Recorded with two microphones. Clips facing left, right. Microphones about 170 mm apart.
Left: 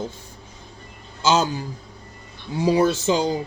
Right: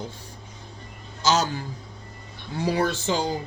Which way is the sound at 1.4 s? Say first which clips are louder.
Left 3 dB; 15° left (ahead or behind).